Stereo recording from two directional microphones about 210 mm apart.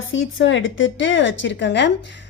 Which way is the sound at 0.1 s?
65° left (ahead or behind).